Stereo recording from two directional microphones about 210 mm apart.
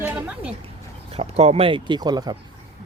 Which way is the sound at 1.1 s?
30° right (ahead or behind).